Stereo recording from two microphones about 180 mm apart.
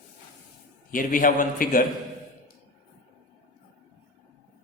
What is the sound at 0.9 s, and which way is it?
A man's voice, 50° left (ahead or behind).